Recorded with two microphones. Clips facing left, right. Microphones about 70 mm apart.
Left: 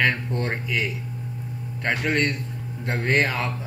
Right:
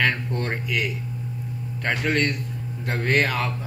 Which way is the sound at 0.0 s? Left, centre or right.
Centre.